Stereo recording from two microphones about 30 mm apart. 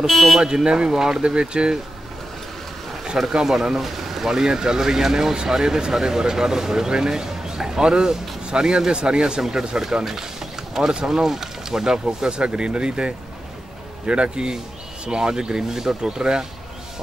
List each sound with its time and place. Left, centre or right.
0.0 s speech: centre
0.4 s speech: right
0.9 s speech: centre
1.2 s speech: right
3.4 s speech: centre